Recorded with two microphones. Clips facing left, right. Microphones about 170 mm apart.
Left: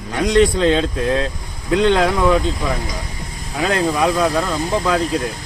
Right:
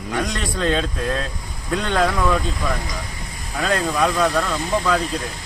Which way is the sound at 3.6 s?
5° left (ahead or behind).